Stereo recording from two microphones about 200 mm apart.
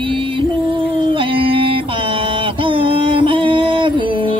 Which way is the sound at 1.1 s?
25° right (ahead or behind).